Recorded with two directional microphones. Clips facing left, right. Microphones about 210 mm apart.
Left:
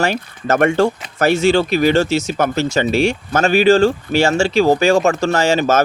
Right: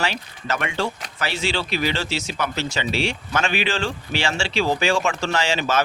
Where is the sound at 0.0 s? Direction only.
45° left (ahead or behind).